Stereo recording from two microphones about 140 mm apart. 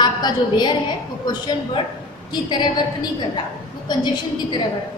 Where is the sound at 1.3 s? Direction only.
30° left (ahead or behind).